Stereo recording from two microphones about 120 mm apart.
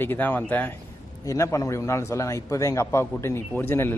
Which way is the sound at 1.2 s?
25° left (ahead or behind).